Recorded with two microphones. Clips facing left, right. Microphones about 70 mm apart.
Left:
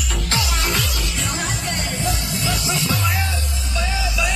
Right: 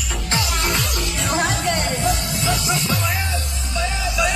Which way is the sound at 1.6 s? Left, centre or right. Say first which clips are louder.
Right 4 dB; right.